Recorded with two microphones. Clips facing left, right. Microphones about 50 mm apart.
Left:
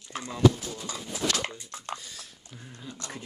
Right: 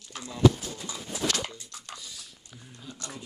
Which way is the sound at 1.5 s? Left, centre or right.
Left.